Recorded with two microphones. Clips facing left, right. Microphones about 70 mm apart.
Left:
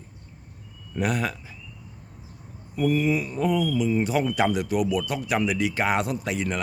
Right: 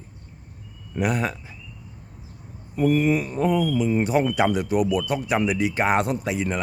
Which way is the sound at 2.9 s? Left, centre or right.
Right.